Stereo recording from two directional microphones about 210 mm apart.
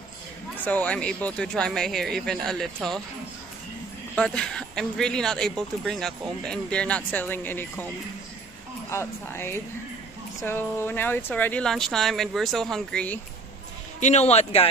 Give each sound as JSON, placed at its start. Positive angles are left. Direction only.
{"t": 0.7, "sound": "speech", "side_deg": 5}
{"t": 4.1, "sound": "speech", "side_deg": 5}
{"t": 8.9, "sound": "speech", "side_deg": 10}
{"t": 13.9, "sound": "speech", "side_deg": 35}